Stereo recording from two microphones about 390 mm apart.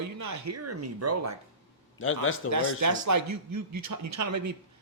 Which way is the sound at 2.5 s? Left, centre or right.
Right.